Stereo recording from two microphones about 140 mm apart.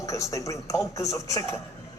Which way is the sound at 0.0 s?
20° left (ahead or behind).